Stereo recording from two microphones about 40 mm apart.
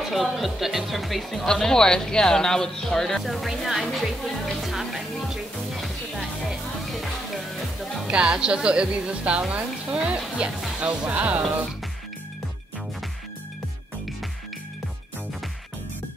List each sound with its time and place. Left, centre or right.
0.0 s speech: centre
1.4 s speech: centre
3.2 s speech: centre
6.9 s music: centre
8.1 s speech: right